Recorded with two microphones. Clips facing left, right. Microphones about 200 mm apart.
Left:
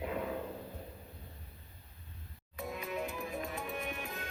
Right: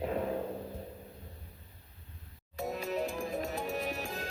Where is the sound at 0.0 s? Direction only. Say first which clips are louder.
Right 4 dB; 35° right (ahead or behind).